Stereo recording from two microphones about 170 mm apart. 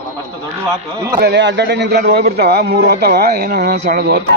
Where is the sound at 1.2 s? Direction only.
85° right; by 4.2 s 65° right (ahead or behind).